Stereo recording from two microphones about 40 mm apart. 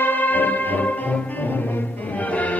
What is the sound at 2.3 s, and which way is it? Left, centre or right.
Music, left.